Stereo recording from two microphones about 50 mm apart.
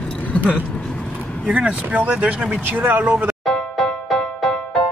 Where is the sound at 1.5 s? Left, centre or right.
Right.